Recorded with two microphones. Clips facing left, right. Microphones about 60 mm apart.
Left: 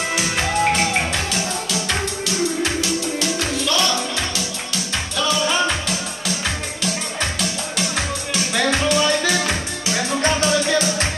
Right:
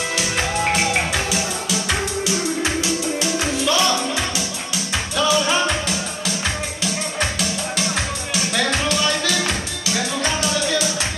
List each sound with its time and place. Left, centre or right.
0.4 s music: centre
5.1 s music: centre
7.2 s music: centre
8.5 s music: centre